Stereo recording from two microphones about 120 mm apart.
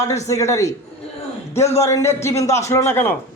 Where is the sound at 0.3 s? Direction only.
25° left (ahead or behind).